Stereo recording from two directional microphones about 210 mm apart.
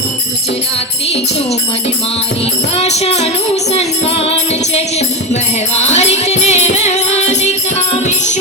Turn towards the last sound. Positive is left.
turn(degrees=30)  # may be behind; listen again after turning